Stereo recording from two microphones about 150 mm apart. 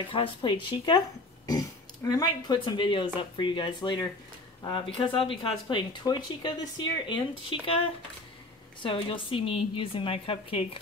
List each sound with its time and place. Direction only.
0.1 s a woman's voice: 35° left (ahead or behind)
8.8 s a woman's voice: 35° left (ahead or behind)